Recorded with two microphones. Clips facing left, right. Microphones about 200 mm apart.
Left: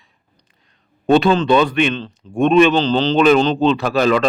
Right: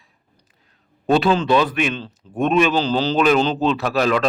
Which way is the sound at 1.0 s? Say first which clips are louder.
Left 3 dB; 5° right (ahead or behind).